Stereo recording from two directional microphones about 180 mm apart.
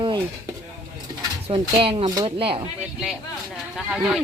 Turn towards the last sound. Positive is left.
turn(degrees=-5)  # may be behind; listen again after turning